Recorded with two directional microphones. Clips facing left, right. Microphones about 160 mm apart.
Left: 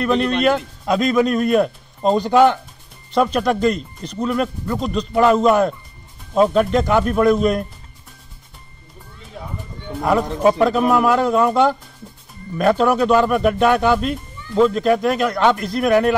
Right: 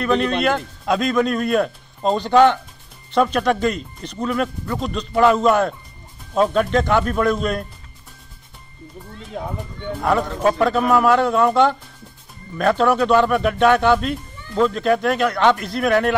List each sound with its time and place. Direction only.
0.0 s a man's voice: centre (ahead or behind)
3.7 s speech: 40° left (ahead or behind)
4.2 s a man's voice: centre (ahead or behind)
9.3 s speech: 50° right (ahead or behind)
9.9 s a man's voice: 5° left (ahead or behind)